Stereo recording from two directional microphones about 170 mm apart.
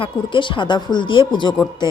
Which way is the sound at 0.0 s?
30° left (ahead or behind).